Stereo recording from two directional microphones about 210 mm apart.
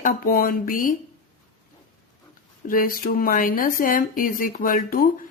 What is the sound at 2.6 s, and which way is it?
A woman's voice, 40° left (ahead or behind).